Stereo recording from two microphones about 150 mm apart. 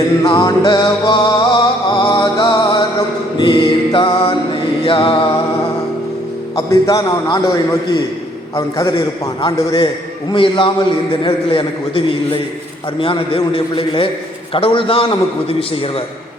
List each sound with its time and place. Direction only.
0.2 s music: 25° left (ahead or behind)
3.3 s mantra: 30° left (ahead or behind)
6.7 s music: 25° left (ahead or behind)
10.3 s a man's voice: 35° left (ahead or behind)